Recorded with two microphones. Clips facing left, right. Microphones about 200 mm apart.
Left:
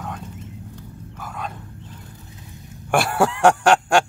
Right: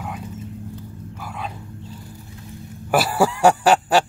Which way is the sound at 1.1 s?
5° right (ahead or behind).